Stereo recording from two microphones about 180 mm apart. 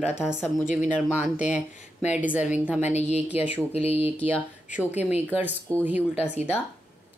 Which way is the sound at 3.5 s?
35° left (ahead or behind).